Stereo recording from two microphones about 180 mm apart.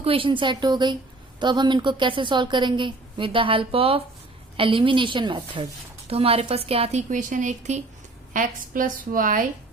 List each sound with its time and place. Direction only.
0.0 s a woman's voice: 30° right (ahead or behind); by 9.5 s 50° right (ahead or behind)